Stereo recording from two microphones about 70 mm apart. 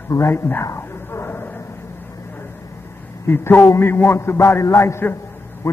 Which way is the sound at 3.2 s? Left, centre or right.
Left.